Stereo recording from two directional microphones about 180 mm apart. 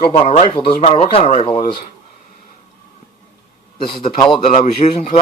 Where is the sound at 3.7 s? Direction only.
25° left (ahead or behind).